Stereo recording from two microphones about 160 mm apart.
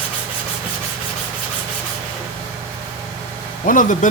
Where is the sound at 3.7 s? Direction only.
55° left (ahead or behind).